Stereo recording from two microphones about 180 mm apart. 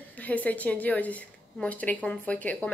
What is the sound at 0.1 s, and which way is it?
A woman's voice, 10° left (ahead or behind).